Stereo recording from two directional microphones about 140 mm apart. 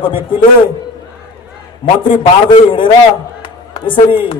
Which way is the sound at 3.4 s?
40° left (ahead or behind).